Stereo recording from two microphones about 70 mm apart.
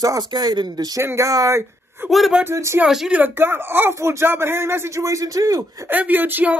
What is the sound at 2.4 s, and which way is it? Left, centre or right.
Speech, right.